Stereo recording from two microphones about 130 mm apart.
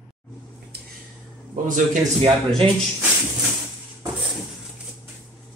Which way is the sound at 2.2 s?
45° right (ahead or behind).